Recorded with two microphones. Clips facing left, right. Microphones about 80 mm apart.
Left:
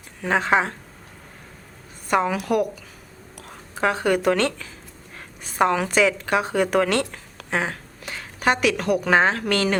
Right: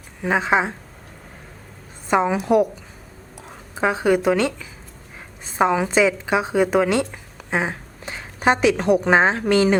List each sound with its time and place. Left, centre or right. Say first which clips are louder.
0.2 s speech: right 1 dB; centre
2.0 s a woman's voice: right 3 dB; right